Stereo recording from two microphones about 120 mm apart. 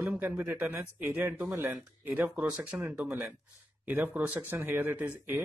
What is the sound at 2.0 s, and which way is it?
Speech, 15° right (ahead or behind).